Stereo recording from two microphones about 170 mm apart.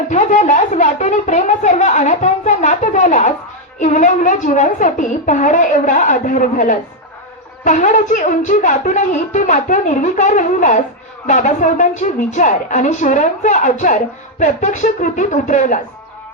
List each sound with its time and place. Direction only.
0.1 s a woman's voice: 45° left (ahead or behind)